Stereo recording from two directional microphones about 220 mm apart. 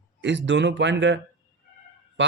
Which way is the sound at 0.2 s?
55° right (ahead or behind).